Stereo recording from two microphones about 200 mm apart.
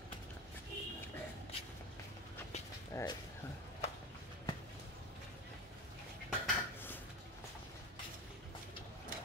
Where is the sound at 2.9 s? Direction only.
15° left (ahead or behind).